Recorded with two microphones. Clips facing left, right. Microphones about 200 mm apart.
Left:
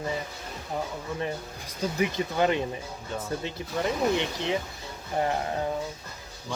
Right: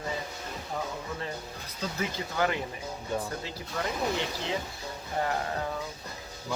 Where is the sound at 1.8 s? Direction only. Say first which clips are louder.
Left 6 dB; 20° left (ahead or behind).